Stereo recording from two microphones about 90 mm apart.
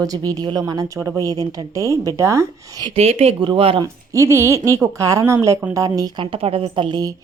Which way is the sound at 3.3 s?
70° right (ahead or behind).